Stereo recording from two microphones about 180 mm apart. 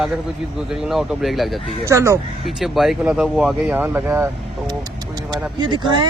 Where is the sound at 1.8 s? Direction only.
15° right (ahead or behind).